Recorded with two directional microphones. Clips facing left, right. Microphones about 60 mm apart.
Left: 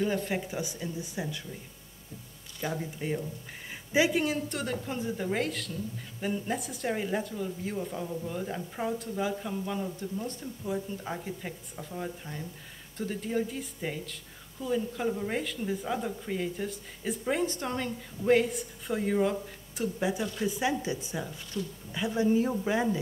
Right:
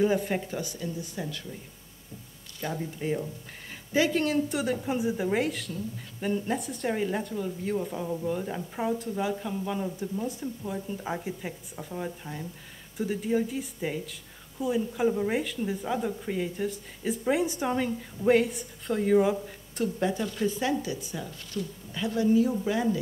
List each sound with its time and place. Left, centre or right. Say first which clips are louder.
0.6 s speech: right 1 dB; centre
2.6 s speech: right 1 dB; centre
4.5 s speech: right 5 dB; centre
19.8 s speech: right 2 dB; centre
20.8 s speech: left 1 dB; left
21.5 s speech: right 1 dB; centre